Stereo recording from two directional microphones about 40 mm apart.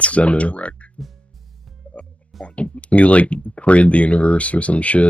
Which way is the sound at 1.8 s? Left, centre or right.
Left.